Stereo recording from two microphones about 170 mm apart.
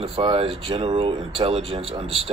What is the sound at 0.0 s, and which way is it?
Speech, 30° right (ahead or behind).